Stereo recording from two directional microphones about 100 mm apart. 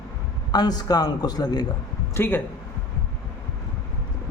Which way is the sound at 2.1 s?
20° left (ahead or behind).